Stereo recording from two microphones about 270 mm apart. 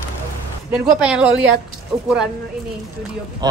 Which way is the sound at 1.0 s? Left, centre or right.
Centre.